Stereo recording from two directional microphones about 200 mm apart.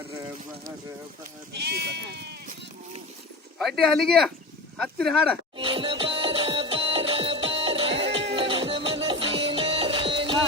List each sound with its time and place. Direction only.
1.5 s speech: 55° right (ahead or behind)
3.6 s speech: centre (ahead or behind)
5.5 s music: 25° right (ahead or behind)